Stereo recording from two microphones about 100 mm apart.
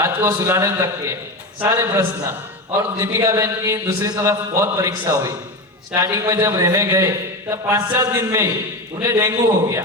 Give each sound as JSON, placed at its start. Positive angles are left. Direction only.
{"t": 0.0, "sound": "a man's voice", "side_deg": -30}